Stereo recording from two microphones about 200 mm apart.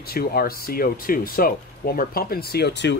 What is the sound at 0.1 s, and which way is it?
Speech, 50° left (ahead or behind).